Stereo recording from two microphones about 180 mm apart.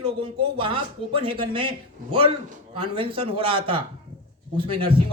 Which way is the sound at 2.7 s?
30° right (ahead or behind).